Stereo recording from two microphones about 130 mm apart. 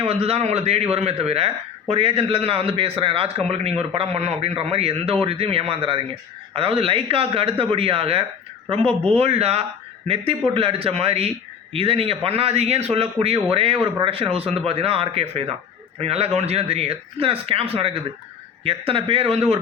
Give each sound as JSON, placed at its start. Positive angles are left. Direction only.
{"t": 0.0, "sound": "a man's voice", "side_deg": -45}